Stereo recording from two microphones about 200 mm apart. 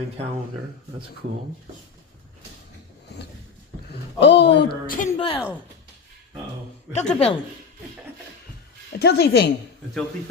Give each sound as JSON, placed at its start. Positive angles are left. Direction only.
{"t": 4.2, "sound": "speech", "side_deg": 60}
{"t": 4.9, "sound": "a woman's voice", "side_deg": 40}
{"t": 5.1, "sound": "a woman's voice", "side_deg": 30}
{"t": 6.9, "sound": "a woman's voice", "side_deg": 30}
{"t": 9.0, "sound": "speech", "side_deg": 55}